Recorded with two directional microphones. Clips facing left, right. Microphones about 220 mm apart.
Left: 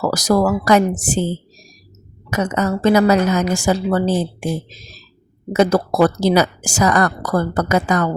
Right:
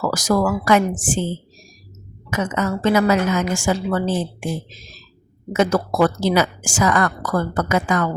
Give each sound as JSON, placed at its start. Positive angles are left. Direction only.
{"t": 0.0, "sound": "a woman's voice", "side_deg": 35}
{"t": 2.3, "sound": "a woman's voice", "side_deg": 40}